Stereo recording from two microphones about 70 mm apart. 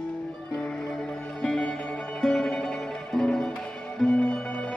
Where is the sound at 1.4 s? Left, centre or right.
Centre.